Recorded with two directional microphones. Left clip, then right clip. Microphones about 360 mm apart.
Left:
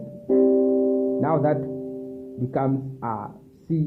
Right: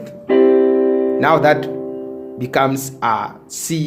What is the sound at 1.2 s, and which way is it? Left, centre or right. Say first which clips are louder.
Speech: right 9 dB; centre.